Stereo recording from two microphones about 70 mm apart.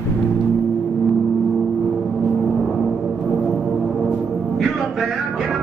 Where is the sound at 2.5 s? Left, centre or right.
Centre.